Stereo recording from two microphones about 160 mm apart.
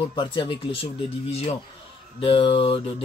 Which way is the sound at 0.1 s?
30° left (ahead or behind).